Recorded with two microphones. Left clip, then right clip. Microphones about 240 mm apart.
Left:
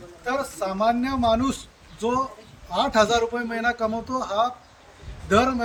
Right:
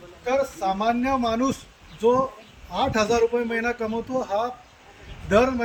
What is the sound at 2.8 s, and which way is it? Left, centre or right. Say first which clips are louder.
A man's voice: left 1 dB; centre.